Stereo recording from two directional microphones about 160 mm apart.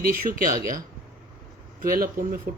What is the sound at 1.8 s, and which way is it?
Speech, 65° right (ahead or behind).